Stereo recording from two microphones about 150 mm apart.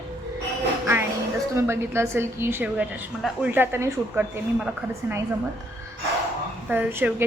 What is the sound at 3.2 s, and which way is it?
Speech, centre (ahead or behind).